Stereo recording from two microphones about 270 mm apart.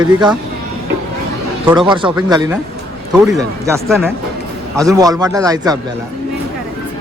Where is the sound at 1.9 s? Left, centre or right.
Centre.